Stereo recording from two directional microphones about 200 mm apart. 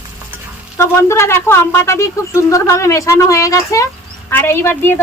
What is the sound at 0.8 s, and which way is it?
Speech, 15° left (ahead or behind).